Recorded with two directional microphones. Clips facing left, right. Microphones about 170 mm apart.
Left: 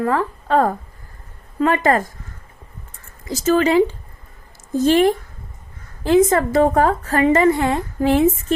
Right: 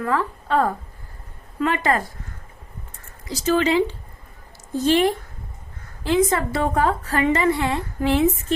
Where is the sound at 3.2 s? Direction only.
45° left (ahead or behind).